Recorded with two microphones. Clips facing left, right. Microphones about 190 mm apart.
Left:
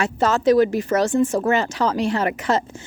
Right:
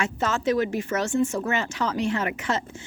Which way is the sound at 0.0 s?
35° left (ahead or behind).